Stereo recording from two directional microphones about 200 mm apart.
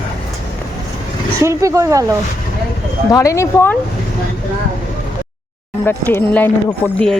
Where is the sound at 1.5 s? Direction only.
15° right (ahead or behind).